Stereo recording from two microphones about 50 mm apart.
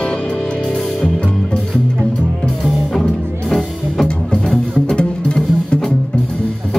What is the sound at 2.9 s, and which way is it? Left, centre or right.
Music, centre.